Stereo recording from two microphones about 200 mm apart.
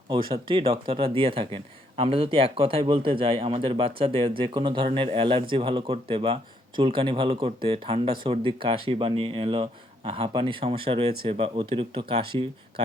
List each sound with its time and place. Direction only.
0.1 s speech: 25° right (ahead or behind)